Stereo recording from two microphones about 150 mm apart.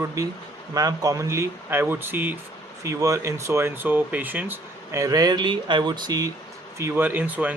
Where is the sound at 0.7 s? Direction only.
25° right (ahead or behind).